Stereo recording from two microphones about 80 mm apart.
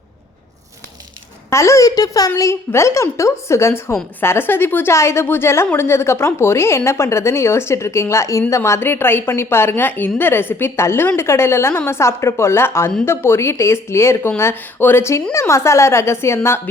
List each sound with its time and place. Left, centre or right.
1.5 s speech: left
2.4 s a woman's voice: left